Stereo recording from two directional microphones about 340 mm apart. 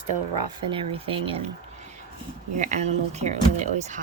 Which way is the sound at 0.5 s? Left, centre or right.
Centre.